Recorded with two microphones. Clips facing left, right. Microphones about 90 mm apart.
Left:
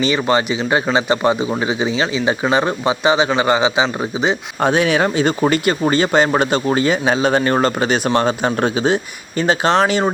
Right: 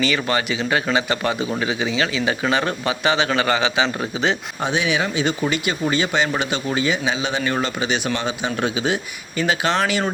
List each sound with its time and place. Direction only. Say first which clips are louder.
0.0 s speech: left 5 dB; 25° left (ahead or behind)
4.6 s speech: left 7 dB; 50° left (ahead or behind)